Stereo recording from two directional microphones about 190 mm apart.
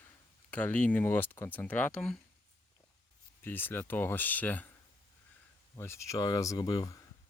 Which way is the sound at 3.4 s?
10° left (ahead or behind).